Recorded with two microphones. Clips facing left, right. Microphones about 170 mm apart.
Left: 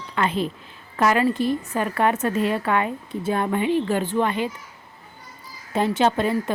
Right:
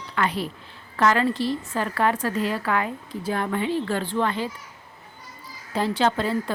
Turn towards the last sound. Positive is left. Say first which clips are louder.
# left 2 dB
turn(degrees=20)  # may be behind; listen again after turning